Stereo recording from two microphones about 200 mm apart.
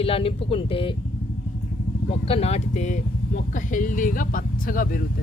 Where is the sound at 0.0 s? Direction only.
30° left (ahead or behind).